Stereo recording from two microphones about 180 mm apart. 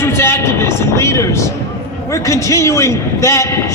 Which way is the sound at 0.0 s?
15° left (ahead or behind).